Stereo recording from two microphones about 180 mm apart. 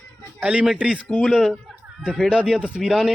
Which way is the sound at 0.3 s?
5° right (ahead or behind).